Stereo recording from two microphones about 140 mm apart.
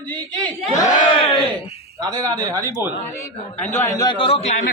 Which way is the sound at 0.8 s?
60° left (ahead or behind).